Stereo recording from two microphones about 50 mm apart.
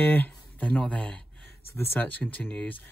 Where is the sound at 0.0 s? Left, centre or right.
Left.